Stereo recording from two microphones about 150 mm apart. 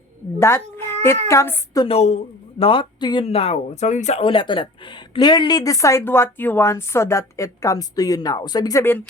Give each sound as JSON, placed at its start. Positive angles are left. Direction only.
{"t": 0.3, "sound": "a sound", "side_deg": 15}
{"t": 1.3, "sound": "a woman's voice", "side_deg": 20}
{"t": 1.9, "sound": "speech", "side_deg": 45}
{"t": 3.2, "sound": "a woman's voice", "side_deg": 40}